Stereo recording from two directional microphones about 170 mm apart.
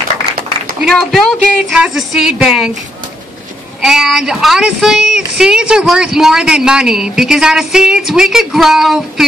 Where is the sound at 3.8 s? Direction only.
5° right (ahead or behind).